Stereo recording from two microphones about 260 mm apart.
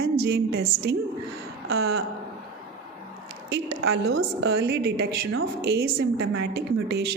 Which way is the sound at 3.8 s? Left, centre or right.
Right.